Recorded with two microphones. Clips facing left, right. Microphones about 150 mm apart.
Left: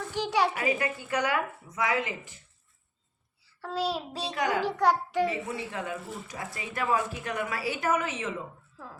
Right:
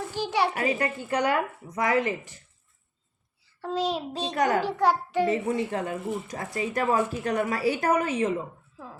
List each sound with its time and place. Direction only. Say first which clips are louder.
0.0 s a sound: right 1 dB; 10° right (ahead or behind)
0.4 s a woman's voice: right 2 dB; 40° right (ahead or behind)
3.7 s child singing: right 3 dB; 10° left (ahead or behind)
4.4 s speech: right 4 dB; 45° right (ahead or behind)
4.6 s a child's voice: right 1 dB; 10° right (ahead or behind)
5.3 s speech: right 8 dB; 50° right (ahead or behind)